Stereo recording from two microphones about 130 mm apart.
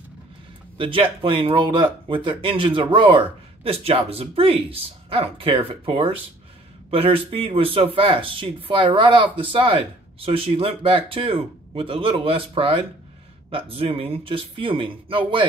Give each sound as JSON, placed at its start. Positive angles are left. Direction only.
{"t": 0.7, "sound": "speech", "side_deg": -45}